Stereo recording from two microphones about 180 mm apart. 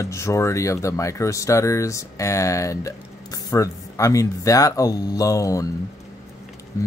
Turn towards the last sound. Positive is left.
turn(degrees=15)  # may be behind; listen again after turning